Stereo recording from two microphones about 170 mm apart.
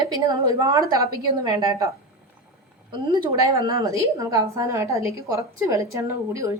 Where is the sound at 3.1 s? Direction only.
20° right (ahead or behind).